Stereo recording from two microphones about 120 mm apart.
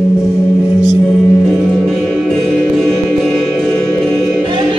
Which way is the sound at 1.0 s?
Centre (ahead or behind).